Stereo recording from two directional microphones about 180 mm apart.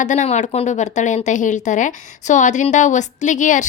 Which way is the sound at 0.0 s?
40° left (ahead or behind).